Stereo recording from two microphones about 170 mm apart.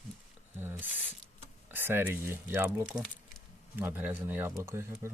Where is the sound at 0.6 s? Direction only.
10° right (ahead or behind).